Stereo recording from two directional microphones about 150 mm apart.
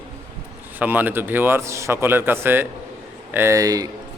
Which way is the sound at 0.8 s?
10° right (ahead or behind).